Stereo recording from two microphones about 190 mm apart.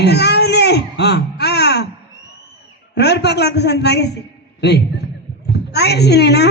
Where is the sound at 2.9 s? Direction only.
60° left (ahead or behind).